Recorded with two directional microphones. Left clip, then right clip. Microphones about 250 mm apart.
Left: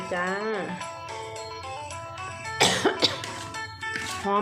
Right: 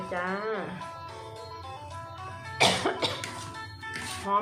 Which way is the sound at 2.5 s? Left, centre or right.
Left.